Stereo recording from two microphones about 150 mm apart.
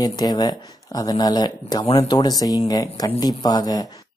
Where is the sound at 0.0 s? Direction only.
25° left (ahead or behind).